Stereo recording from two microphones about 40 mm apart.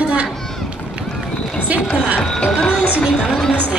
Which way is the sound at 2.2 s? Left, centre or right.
Centre.